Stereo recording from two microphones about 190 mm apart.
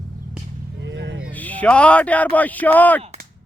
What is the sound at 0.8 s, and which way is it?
Speech, 65° right (ahead or behind).